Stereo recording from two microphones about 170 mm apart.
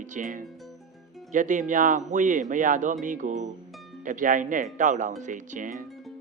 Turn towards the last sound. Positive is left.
turn(degrees=-50)  # may be behind; listen again after turning